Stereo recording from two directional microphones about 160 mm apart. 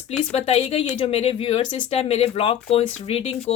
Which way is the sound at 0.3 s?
35° left (ahead or behind).